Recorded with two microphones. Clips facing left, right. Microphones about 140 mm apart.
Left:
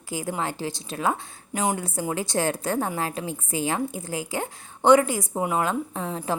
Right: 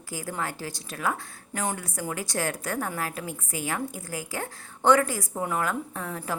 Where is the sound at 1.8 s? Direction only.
25° left (ahead or behind).